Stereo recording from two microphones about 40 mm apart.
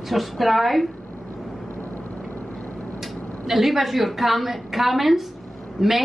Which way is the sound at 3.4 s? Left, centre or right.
Centre.